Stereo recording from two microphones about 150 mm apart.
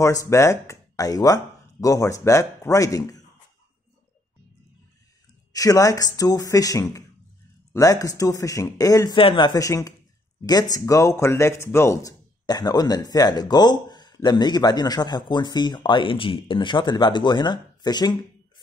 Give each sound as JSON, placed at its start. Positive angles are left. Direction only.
{"t": 0.0, "sound": "speech", "side_deg": 20}
{"t": 5.5, "sound": "speech", "side_deg": 25}